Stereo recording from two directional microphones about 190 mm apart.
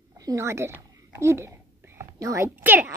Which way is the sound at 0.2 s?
15° right (ahead or behind).